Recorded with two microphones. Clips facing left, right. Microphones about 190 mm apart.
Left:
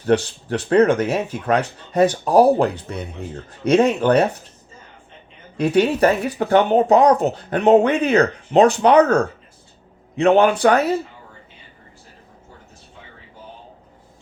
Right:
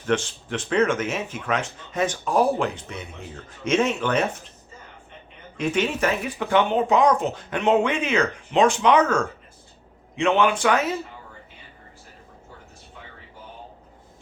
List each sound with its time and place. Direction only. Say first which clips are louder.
0.0 s speech: left 6 dB; 35° left (ahead or behind)
5.5 s speech: left 7 dB; 35° left (ahead or behind)